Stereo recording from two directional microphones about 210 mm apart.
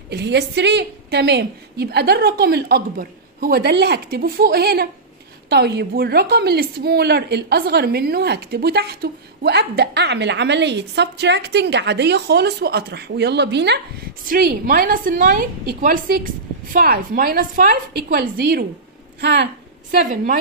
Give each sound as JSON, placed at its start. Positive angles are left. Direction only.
{"t": 0.1, "sound": "a woman's voice", "side_deg": -50}
{"t": 14.3, "sound": "a woman's voice", "side_deg": -45}